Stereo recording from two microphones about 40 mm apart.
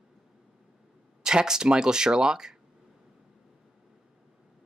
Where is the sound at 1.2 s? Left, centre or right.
Centre.